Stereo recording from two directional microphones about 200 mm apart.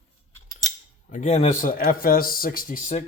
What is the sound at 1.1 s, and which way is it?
A man's voice, 40° left (ahead or behind).